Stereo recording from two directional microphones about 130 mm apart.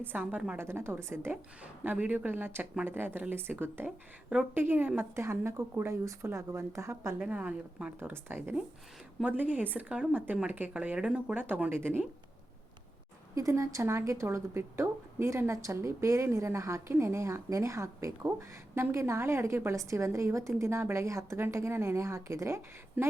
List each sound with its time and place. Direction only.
0.0 s a woman's voice: 15° right (ahead or behind)
7.2 s a woman's voice: 10° right (ahead or behind)
13.3 s speech: 25° right (ahead or behind)